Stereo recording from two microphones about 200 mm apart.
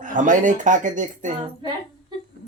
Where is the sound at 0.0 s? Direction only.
40° right (ahead or behind).